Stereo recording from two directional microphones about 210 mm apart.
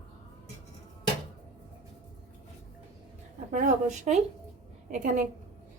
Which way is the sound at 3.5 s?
40° right (ahead or behind).